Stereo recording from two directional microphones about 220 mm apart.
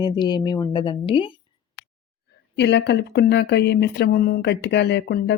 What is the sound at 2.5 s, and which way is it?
Speech, 50° left (ahead or behind).